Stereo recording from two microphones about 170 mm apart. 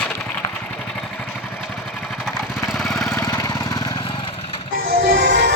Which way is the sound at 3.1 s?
20° left (ahead or behind).